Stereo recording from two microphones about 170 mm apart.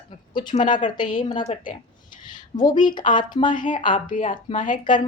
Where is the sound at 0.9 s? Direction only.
30° left (ahead or behind).